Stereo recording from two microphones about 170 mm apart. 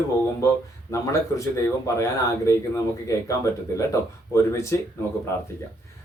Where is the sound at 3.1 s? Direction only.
20° left (ahead or behind).